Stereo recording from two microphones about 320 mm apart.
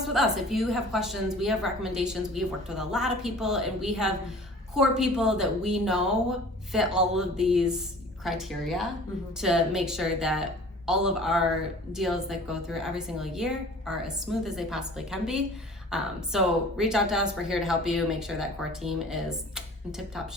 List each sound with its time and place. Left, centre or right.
0.1 s a woman's voice: centre